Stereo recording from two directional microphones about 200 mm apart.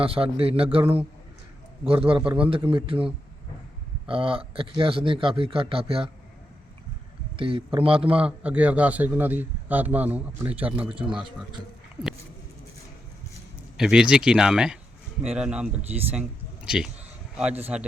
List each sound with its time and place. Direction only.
0.0 s a man's voice: 30° right (ahead or behind)
4.1 s a man's voice: 25° right (ahead or behind)
7.3 s a man's voice: 25° right (ahead or behind)
8.2 s a man's voice: 5° right (ahead or behind)
13.7 s speech: 5° right (ahead or behind)